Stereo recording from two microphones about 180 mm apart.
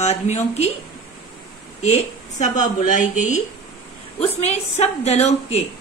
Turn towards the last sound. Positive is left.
turn(degrees=40)  # may be behind; listen again after turning